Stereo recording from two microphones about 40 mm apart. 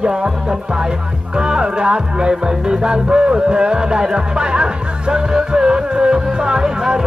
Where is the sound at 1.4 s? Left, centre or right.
Right.